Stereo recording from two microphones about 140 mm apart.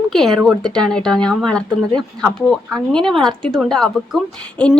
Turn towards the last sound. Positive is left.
turn(degrees=5)  # may be behind; listen again after turning